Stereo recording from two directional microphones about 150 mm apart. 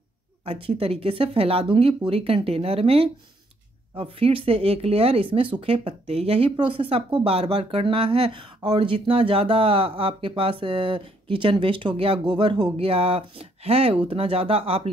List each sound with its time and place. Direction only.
0.5 s speech: 40° right (ahead or behind)